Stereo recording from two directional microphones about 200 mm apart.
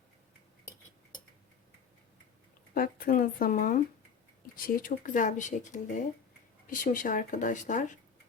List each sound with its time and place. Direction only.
2.7 s speech: 45° left (ahead or behind)